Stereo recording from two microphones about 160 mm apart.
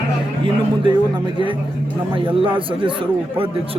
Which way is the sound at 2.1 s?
30° right (ahead or behind).